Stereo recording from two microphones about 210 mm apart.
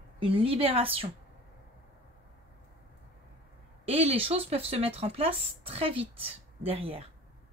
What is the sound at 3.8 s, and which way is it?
Speech, 30° right (ahead or behind).